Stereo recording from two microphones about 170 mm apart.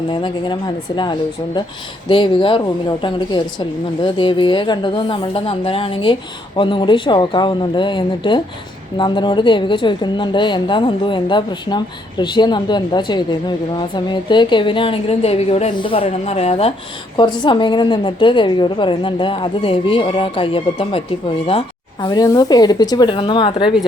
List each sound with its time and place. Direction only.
0.1 s a woman's voice: 25° left (ahead or behind)
22.0 s a woman's voice: 25° left (ahead or behind)